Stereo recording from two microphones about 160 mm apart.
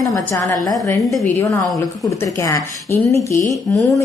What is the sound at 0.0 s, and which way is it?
Speech, 20° left (ahead or behind).